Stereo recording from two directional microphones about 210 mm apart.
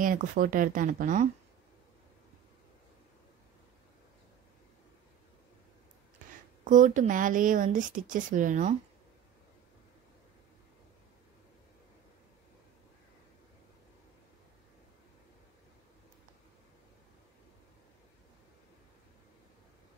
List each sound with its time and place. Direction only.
0.0 s speech: 40° right (ahead or behind)
6.6 s speech: 40° right (ahead or behind)